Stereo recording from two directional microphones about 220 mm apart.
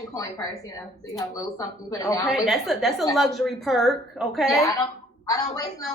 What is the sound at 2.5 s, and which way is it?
A woman's voice, centre (ahead or behind).